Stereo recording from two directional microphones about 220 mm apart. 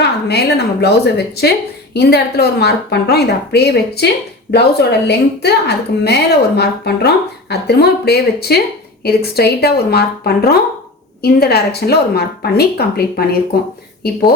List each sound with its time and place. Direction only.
0.0 s a woman's voice: 50° left (ahead or behind)